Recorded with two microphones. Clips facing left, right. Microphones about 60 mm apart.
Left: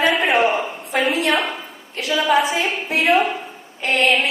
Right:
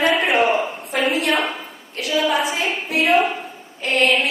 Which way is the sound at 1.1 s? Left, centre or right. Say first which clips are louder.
Even; left.